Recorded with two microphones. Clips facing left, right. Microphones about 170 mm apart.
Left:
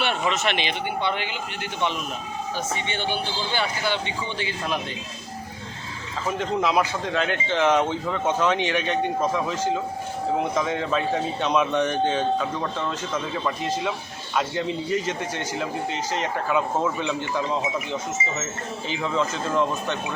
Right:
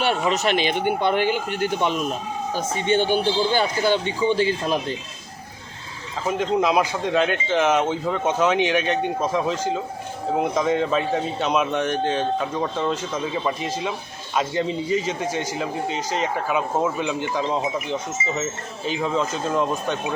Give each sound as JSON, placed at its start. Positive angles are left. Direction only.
{"t": 0.0, "sound": "speech", "side_deg": -40}
{"t": 6.4, "sound": "speech", "side_deg": -15}
{"t": 10.7, "sound": "speech", "side_deg": -10}
{"t": 11.7, "sound": "speech", "side_deg": 0}
{"t": 12.4, "sound": "speech", "side_deg": -15}
{"t": 15.0, "sound": "speech", "side_deg": -10}
{"t": 19.1, "sound": "speech", "side_deg": -15}